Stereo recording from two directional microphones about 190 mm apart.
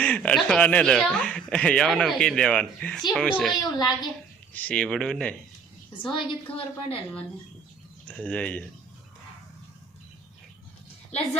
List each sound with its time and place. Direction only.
0.0 s speech: 5° left (ahead or behind)
3.6 s a woman's voice: 20° left (ahead or behind)
4.5 s speech: 10° left (ahead or behind)
6.0 s a woman's voice: 25° left (ahead or behind)
8.0 s speech: 5° left (ahead or behind)